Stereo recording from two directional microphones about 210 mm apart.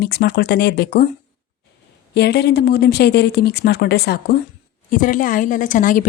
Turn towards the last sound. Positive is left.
turn(degrees=40)  # may be behind; listen again after turning